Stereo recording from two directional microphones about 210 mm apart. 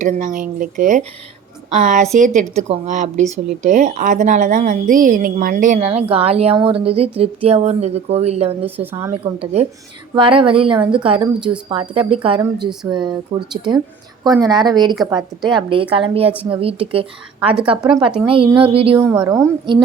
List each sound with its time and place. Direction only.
0.0 s a woman's voice: 40° right (ahead or behind)
8.6 s a woman's voice: 10° right (ahead or behind)
9.0 s a woman's voice: 25° right (ahead or behind)
18.9 s a woman's voice: 10° right (ahead or behind)